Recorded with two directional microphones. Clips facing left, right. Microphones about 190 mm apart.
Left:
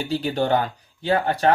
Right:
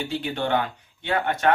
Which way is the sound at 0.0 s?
40° left (ahead or behind).